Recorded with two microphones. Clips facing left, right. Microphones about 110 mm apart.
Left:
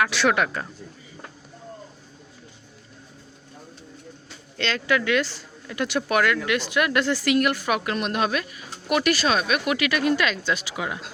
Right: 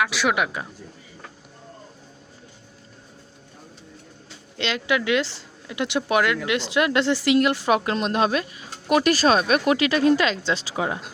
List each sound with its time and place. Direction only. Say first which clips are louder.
0.0 s speech: left 1 dB; 5° right (ahead or behind)
4.5 s speech: even; 20° right (ahead or behind)